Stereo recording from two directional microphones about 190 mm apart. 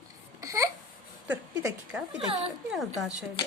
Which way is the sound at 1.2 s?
10° right (ahead or behind).